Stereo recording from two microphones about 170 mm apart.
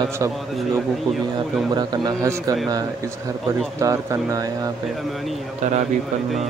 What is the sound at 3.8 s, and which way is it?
Speech, 20° right (ahead or behind).